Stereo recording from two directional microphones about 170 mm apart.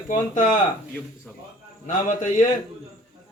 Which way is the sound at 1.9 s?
45° left (ahead or behind).